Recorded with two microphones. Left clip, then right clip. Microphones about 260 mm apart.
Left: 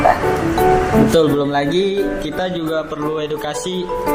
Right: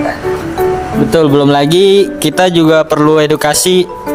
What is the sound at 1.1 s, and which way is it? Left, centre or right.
Speech, right.